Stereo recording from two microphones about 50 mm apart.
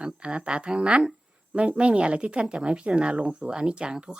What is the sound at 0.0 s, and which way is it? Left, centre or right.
Speech, right.